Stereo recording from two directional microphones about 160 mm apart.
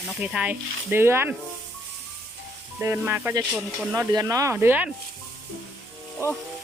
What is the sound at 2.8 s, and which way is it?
Speech, 15° right (ahead or behind).